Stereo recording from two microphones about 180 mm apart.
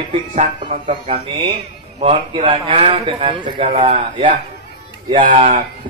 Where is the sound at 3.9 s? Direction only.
45° right (ahead or behind).